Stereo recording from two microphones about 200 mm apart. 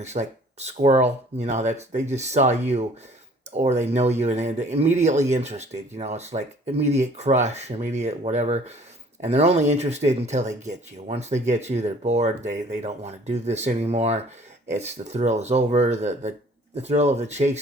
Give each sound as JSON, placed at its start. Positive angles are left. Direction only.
{"t": 0.0, "sound": "speech", "side_deg": -35}